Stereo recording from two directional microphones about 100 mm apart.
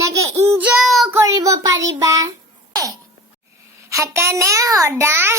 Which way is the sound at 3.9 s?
30° right (ahead or behind).